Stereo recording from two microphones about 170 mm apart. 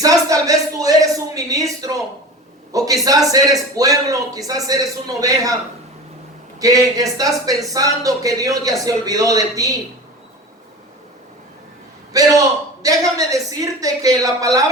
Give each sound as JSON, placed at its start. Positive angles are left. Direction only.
{"t": 0.0, "sound": "a sound", "side_deg": -20}
{"t": 3.3, "sound": "a man's voice", "side_deg": -20}
{"t": 6.6, "sound": "a man's voice", "side_deg": -20}
{"t": 12.1, "sound": "a man's voice", "side_deg": -20}